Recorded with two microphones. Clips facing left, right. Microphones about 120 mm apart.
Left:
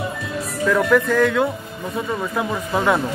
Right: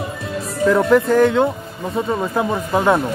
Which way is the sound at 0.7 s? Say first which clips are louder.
Right 3 dB; 25° right (ahead or behind).